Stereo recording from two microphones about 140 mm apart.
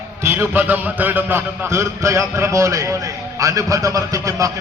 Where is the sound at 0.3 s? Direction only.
15° right (ahead or behind).